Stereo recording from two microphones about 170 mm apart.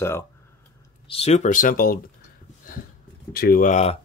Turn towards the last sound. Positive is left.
turn(degrees=45)  # may be behind; listen again after turning